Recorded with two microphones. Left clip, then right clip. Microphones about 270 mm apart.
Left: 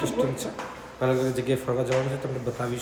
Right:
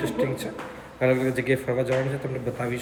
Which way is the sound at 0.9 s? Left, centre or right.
Centre.